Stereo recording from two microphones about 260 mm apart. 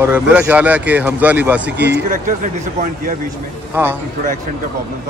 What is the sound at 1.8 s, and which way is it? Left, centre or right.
Speech, right.